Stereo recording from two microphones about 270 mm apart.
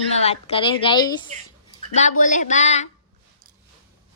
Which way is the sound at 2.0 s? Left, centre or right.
Left.